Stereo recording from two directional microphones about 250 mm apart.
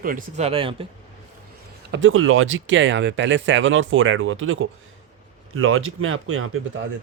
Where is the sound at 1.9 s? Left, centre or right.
Right.